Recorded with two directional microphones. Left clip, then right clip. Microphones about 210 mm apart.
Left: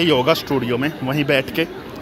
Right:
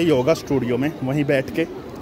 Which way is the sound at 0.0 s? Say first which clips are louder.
Left 2 dB; 15° right (ahead or behind).